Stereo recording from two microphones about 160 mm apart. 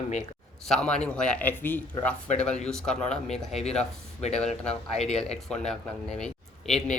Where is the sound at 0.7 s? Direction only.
5° left (ahead or behind).